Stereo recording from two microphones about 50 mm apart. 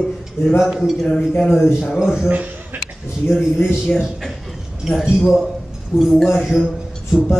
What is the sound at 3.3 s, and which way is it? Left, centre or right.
A man's voice, centre.